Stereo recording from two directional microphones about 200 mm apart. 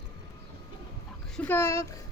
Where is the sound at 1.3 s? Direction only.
10° left (ahead or behind).